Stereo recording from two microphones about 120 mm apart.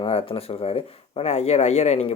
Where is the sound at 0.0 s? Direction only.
55° left (ahead or behind).